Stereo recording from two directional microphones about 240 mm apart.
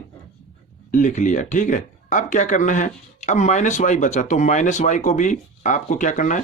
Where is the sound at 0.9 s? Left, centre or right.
Left.